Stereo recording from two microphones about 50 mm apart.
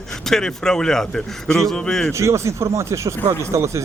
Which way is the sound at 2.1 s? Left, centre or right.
Right.